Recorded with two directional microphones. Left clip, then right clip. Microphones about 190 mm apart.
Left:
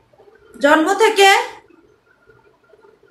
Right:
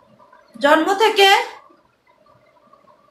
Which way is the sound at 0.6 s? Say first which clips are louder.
Left 1 dB; 10° left (ahead or behind).